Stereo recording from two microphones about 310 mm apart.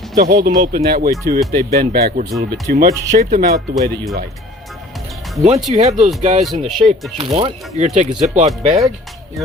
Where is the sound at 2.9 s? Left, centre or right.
Centre.